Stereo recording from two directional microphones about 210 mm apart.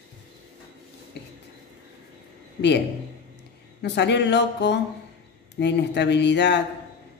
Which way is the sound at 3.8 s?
55° left (ahead or behind).